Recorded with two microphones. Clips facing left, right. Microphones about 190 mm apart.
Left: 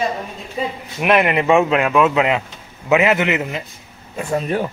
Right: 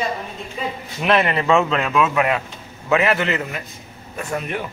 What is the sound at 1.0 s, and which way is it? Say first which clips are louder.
A man's voice: left 3 dB; 15° left (ahead or behind).